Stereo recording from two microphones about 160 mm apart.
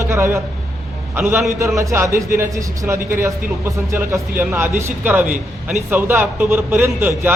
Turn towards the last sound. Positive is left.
turn(degrees=-15)  # may be behind; listen again after turning